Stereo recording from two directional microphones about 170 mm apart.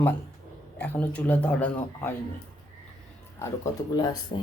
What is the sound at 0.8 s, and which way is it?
Speech, 10° left (ahead or behind).